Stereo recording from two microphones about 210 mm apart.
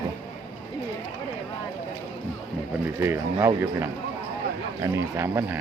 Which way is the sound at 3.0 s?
10° right (ahead or behind).